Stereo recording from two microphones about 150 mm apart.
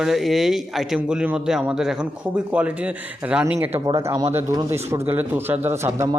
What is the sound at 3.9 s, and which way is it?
Speech, 25° right (ahead or behind).